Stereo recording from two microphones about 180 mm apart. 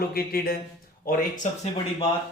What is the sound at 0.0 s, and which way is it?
A man's voice, 55° left (ahead or behind).